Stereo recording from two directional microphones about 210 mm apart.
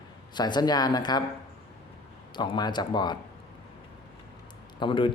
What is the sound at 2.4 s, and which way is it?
Speech, 20° left (ahead or behind).